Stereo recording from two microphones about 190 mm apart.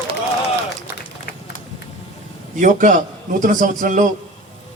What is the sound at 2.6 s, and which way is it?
A man's voice, 45° right (ahead or behind).